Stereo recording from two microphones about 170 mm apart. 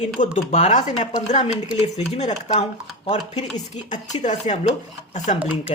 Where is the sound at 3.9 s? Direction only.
45° left (ahead or behind).